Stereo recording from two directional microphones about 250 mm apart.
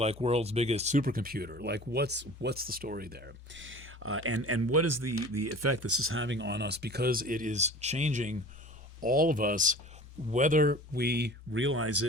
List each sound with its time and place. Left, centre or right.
0.0 s speech: right